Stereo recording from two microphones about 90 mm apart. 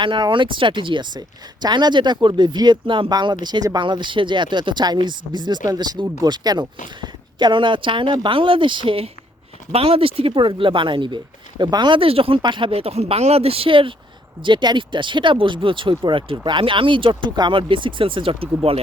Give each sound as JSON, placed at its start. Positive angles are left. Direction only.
{"t": 0.0, "sound": "speech", "side_deg": -65}
{"t": 3.8, "sound": "speech", "side_deg": -60}
{"t": 9.7, "sound": "speech", "side_deg": -90}
{"t": 12.4, "sound": "speech", "side_deg": -60}
{"t": 14.4, "sound": "speech", "side_deg": -60}